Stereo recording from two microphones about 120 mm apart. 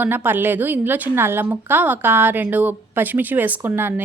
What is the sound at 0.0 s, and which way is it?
A woman's voice, 15° right (ahead or behind).